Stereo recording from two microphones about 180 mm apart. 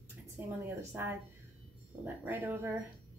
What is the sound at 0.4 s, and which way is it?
Speech, 10° right (ahead or behind).